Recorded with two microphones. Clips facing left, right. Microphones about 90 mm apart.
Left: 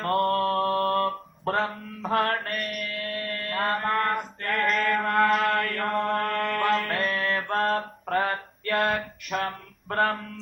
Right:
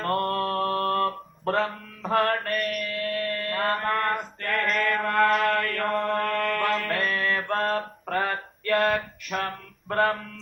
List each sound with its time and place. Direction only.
0.0 s mantra: 30° left (ahead or behind)